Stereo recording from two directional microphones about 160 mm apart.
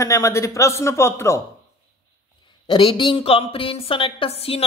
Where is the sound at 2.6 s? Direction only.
30° left (ahead or behind).